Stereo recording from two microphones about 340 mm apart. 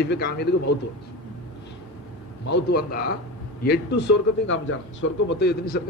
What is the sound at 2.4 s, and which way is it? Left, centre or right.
Speech, left.